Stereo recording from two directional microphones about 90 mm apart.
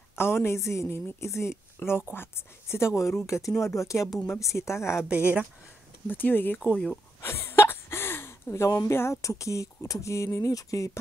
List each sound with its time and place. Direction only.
0.2 s speech: 25° left (ahead or behind)
6.0 s speech: 20° left (ahead or behind)
6.7 s speech: 10° left (ahead or behind)
7.2 s speech: 25° left (ahead or behind)